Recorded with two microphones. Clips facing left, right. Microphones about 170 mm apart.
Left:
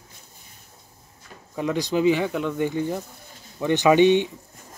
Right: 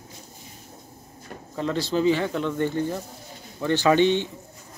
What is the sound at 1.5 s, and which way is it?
Speech, 15° left (ahead or behind).